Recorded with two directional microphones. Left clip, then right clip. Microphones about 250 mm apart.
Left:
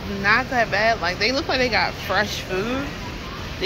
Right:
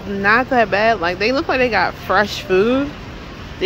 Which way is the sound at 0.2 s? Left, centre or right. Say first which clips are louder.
Right 5 dB; right.